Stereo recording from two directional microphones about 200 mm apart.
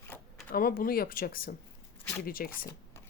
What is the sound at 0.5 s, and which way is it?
A woman's voice, 45° left (ahead or behind).